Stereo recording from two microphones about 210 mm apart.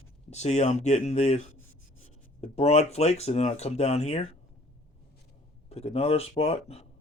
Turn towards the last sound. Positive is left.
turn(degrees=30)  # may be behind; listen again after turning